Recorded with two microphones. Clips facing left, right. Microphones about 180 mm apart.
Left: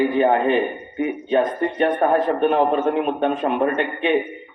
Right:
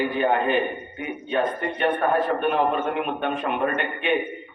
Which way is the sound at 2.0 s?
30° left (ahead or behind).